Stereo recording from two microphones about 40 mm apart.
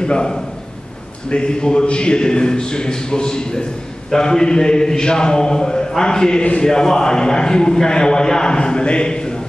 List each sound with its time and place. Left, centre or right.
0.0 s a man's voice: left